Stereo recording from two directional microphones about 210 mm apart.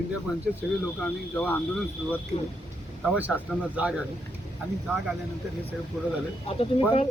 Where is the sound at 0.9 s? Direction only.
5° left (ahead or behind).